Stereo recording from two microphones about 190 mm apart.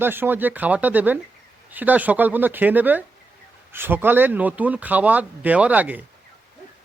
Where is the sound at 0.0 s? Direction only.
10° right (ahead or behind).